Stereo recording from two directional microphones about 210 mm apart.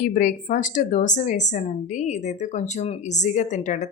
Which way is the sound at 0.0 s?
40° left (ahead or behind).